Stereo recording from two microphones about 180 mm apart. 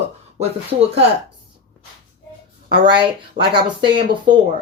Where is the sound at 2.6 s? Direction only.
25° right (ahead or behind).